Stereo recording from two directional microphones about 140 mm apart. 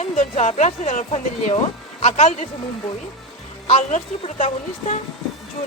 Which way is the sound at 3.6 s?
50° left (ahead or behind).